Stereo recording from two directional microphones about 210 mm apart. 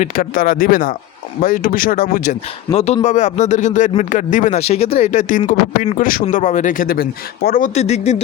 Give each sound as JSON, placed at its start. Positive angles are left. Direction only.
{"t": 0.0, "sound": "speech", "side_deg": 40}
{"t": 2.7, "sound": "speech", "side_deg": 30}